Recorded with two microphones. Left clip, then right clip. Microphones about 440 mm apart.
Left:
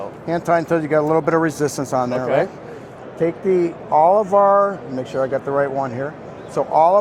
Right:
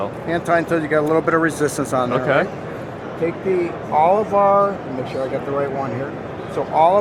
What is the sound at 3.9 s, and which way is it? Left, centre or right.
Speech, left.